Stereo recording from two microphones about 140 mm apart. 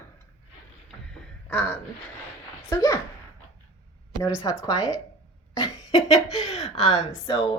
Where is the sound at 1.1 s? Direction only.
10° left (ahead or behind).